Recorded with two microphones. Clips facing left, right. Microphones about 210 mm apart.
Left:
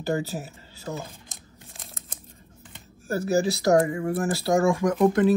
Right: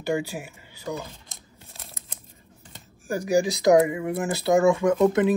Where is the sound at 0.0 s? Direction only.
15° right (ahead or behind).